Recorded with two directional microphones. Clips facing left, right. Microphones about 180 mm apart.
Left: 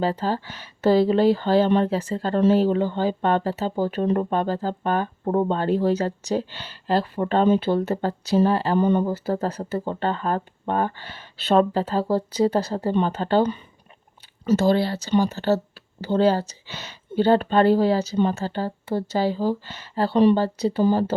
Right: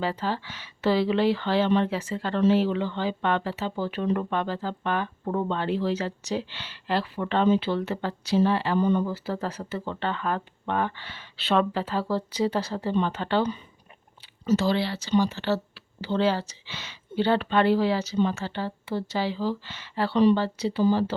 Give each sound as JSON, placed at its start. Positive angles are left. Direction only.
{"t": 0.0, "sound": "speech", "side_deg": 40}